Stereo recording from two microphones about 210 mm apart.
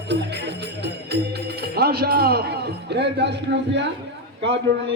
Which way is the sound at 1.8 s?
50° right (ahead or behind).